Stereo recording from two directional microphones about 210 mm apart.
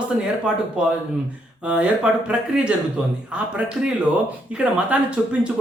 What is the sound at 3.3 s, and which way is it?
Speech, 5° right (ahead or behind).